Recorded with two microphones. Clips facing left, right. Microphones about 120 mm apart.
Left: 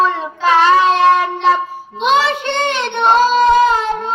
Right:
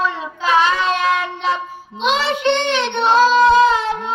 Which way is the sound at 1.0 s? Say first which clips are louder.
Left 7 dB; 35° left (ahead or behind).